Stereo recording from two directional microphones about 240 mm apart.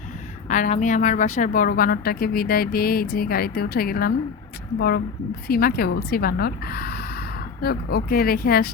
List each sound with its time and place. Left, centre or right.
0.4 s a woman's voice: left